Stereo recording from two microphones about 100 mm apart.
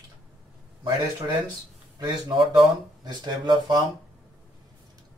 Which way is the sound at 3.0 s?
45° right (ahead or behind).